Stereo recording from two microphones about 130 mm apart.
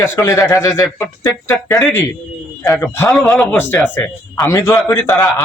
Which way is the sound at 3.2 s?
5° left (ahead or behind).